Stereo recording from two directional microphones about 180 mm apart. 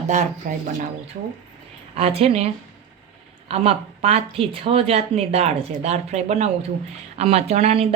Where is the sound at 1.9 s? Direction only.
35° right (ahead or behind).